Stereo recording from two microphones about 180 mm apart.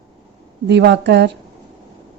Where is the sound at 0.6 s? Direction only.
70° right (ahead or behind).